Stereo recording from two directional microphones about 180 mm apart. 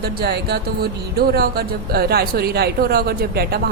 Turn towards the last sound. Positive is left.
turn(degrees=-60)  # may be behind; listen again after turning